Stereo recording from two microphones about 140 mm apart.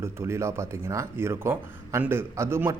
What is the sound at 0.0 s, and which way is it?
Speech, 20° right (ahead or behind).